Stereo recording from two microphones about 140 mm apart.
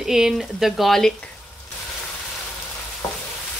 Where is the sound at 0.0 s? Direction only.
5° right (ahead or behind).